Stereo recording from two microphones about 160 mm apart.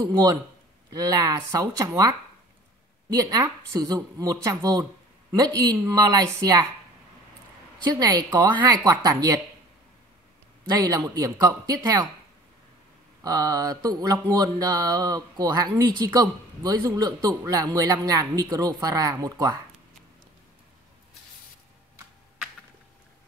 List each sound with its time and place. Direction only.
0.0 s speech: 25° right (ahead or behind)
3.1 s speech: 25° right (ahead or behind)
7.8 s speech: 25° right (ahead or behind)
10.7 s speech: 20° right (ahead or behind)
13.2 s speech: 25° right (ahead or behind)